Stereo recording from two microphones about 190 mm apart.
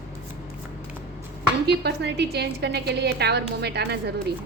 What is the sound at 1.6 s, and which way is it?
A woman's voice, 60° right (ahead or behind).